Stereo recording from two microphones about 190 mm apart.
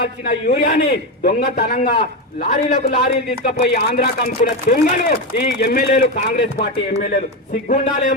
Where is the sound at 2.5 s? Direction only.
40° left (ahead or behind).